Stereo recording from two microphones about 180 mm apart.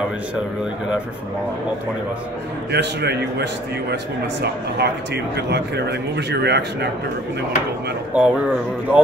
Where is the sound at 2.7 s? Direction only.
65° right (ahead or behind).